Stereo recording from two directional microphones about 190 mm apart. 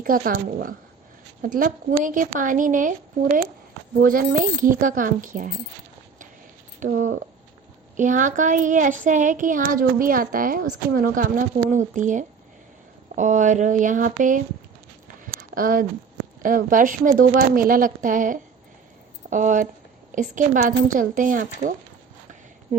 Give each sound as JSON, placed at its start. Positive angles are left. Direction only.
{"t": 0.0, "sound": "speech", "side_deg": -45}
{"t": 4.0, "sound": "speech", "side_deg": -45}
{"t": 6.7, "sound": "speech", "side_deg": -45}
{"t": 15.0, "sound": "a sound", "side_deg": -45}
{"t": 16.4, "sound": "speech", "side_deg": -45}